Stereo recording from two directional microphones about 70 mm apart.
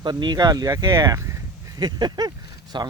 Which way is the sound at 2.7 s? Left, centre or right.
Right.